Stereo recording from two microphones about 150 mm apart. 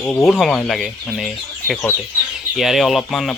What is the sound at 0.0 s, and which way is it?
Speech, 15° left (ahead or behind).